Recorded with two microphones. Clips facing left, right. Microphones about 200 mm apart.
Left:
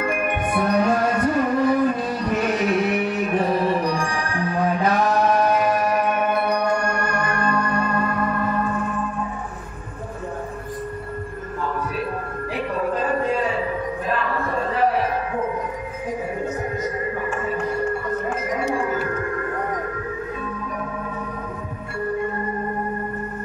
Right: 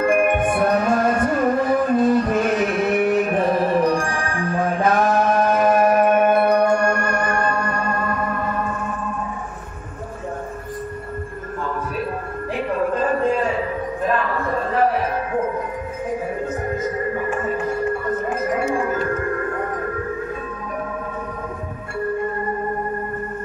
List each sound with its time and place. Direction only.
0.0 s music: 50° right (ahead or behind)